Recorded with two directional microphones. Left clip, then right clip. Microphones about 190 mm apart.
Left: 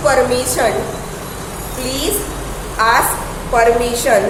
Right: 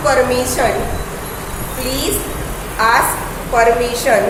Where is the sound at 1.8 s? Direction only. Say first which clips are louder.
Even; 10° left (ahead or behind).